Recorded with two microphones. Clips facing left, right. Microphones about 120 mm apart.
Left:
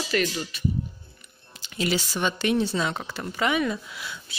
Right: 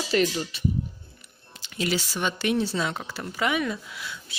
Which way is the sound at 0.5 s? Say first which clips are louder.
Even; 25° right (ahead or behind).